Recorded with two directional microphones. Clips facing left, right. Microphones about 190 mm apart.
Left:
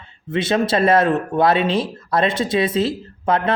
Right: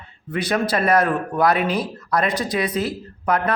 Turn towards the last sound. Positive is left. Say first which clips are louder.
# left 2 dB
turn(degrees=25)  # may be behind; listen again after turning